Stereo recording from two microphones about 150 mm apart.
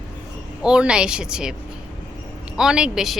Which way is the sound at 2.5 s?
5° right (ahead or behind).